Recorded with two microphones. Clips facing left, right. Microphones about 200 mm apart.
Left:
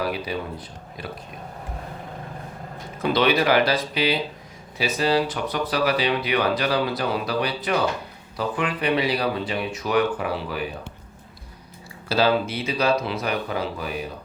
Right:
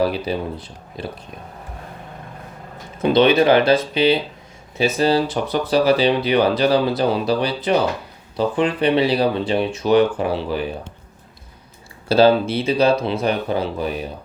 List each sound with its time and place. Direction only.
0.0 s speech: 30° right (ahead or behind)
3.0 s speech: 25° right (ahead or behind)
12.0 s speech: 30° right (ahead or behind)